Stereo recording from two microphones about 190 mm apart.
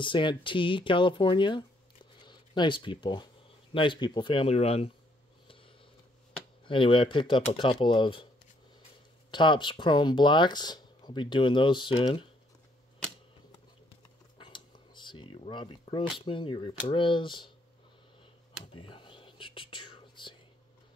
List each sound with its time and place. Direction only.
0.0 s speech: 25° left (ahead or behind)
6.6 s speech: 25° left (ahead or behind)
9.3 s speech: 25° left (ahead or behind)
14.4 s a sound: 25° left (ahead or behind)
16.9 s speech: 25° left (ahead or behind)
18.8 s whispering: 25° left (ahead or behind)